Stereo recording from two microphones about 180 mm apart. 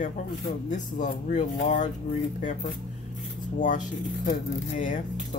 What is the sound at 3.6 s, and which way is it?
Speech, 45° left (ahead or behind).